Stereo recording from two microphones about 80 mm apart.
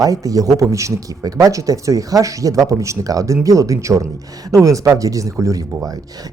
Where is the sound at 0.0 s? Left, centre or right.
Right.